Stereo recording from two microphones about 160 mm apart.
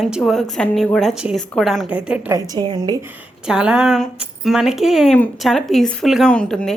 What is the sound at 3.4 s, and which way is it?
A woman's voice, 5° right (ahead or behind).